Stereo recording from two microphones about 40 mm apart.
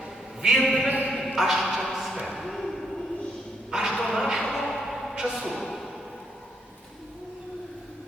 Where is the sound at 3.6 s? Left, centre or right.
Centre.